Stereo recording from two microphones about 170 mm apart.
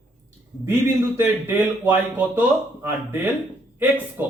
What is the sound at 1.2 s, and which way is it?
Speech, 10° right (ahead or behind).